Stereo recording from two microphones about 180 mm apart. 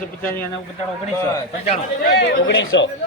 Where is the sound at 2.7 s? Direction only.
80° left.